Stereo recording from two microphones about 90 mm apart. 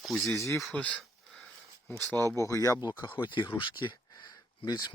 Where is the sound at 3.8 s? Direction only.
55° left (ahead or behind).